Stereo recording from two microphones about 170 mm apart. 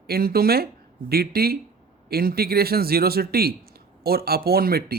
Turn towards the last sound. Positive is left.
turn(degrees=-65)  # may be behind; listen again after turning